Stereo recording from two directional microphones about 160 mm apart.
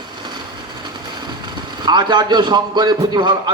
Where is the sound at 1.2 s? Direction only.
30° right (ahead or behind).